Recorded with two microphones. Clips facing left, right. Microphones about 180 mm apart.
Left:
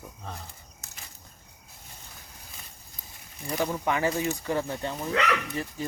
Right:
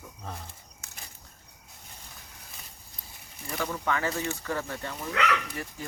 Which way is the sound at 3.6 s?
20° left (ahead or behind).